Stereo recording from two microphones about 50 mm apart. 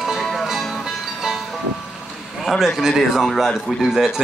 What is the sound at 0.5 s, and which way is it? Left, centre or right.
Music, centre.